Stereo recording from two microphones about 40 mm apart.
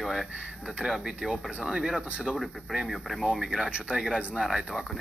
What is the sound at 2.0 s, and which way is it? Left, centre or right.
Speech, right.